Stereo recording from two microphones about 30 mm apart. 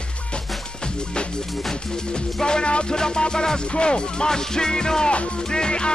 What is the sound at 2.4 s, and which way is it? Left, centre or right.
Music, left.